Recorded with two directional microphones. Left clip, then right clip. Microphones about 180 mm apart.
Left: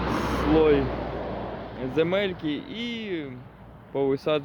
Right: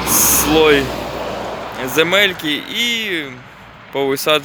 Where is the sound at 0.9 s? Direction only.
80° right.